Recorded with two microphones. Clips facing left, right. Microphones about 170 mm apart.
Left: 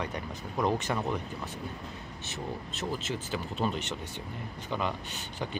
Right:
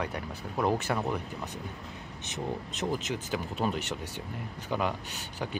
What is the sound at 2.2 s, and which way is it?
Speech, 20° right (ahead or behind).